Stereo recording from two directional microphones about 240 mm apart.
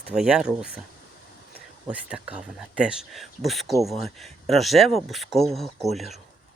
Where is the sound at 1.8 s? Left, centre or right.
Centre.